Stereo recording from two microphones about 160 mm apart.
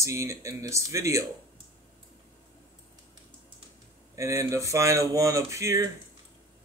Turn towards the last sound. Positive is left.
turn(degrees=-20)  # may be behind; listen again after turning